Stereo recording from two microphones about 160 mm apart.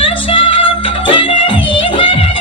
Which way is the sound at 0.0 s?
35° left (ahead or behind).